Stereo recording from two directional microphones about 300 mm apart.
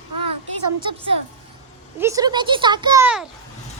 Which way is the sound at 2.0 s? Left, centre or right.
Centre.